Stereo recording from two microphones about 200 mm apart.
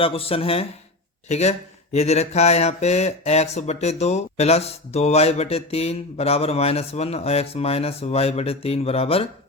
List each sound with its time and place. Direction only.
0.0 s speech: 30° left (ahead or behind)